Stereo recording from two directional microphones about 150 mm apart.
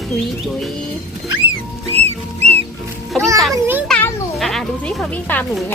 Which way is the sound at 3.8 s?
5° left (ahead or behind).